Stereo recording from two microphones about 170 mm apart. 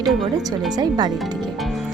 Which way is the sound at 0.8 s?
25° right (ahead or behind).